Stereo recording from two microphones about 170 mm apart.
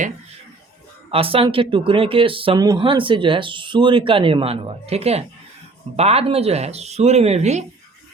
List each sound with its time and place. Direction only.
1.1 s speech: 35° right (ahead or behind)